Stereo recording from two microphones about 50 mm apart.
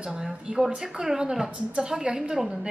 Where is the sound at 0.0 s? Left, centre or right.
Centre.